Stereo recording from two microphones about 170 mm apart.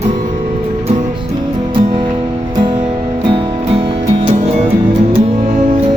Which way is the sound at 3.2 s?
30° right (ahead or behind).